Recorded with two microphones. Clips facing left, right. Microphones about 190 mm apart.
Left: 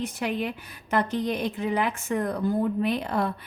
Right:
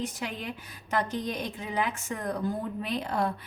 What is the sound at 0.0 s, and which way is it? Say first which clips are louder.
A woman's voice: left 6 dB; 60° left (ahead or behind).